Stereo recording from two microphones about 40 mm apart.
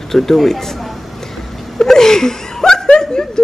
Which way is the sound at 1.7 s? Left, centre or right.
Centre.